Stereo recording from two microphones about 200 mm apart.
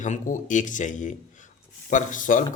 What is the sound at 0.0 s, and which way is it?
Speech, 40° left (ahead or behind).